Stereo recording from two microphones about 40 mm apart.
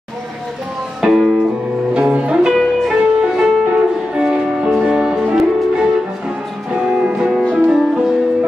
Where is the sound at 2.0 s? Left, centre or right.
Right.